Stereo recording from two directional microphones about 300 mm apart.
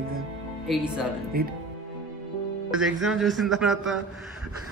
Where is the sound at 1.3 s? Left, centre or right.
Right.